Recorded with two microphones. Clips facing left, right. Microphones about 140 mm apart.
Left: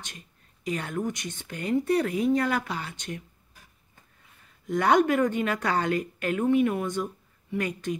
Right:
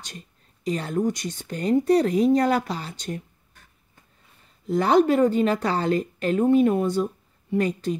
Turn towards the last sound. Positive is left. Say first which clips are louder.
# right 6 dB
turn(degrees=-35)  # may be behind; listen again after turning